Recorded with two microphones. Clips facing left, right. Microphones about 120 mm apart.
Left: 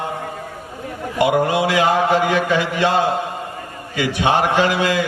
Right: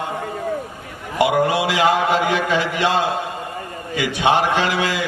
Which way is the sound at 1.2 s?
15° right (ahead or behind).